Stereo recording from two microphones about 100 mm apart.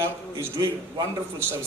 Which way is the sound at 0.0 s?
30° right (ahead or behind).